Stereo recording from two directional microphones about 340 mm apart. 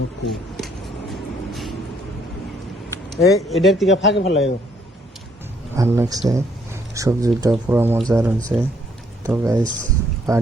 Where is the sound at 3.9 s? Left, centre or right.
Left.